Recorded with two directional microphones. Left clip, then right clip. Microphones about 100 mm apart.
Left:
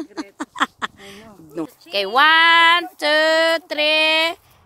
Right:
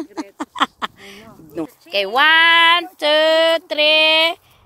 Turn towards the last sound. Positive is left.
turn(degrees=0)  # may be behind; listen again after turning